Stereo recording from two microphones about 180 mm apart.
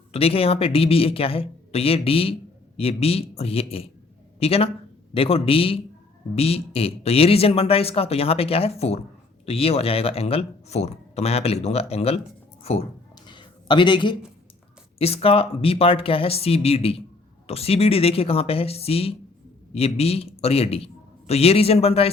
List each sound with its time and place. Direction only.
0.1 s speech: 35° left (ahead or behind)
13.2 s a sound: 25° left (ahead or behind)
14.9 s a man's voice: 35° left (ahead or behind)